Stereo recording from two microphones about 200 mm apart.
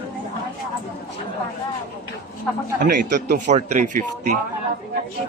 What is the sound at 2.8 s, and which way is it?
Speech, 40° right (ahead or behind).